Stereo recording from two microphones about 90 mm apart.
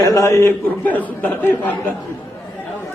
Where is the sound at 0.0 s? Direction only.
35° left (ahead or behind).